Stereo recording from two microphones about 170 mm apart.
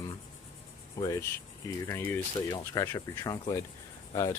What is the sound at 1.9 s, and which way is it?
Speech, 15° left (ahead or behind).